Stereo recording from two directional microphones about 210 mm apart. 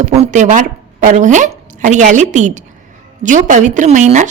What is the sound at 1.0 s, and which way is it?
A woman's voice, 35° right (ahead or behind).